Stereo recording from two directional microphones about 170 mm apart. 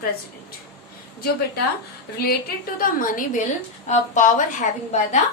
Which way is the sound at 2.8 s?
55° left (ahead or behind).